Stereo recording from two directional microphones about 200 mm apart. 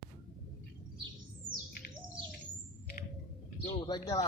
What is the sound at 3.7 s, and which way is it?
Speech, 20° left (ahead or behind).